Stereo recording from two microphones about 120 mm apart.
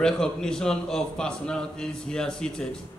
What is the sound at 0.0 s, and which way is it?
A man's voice, 5° left (ahead or behind).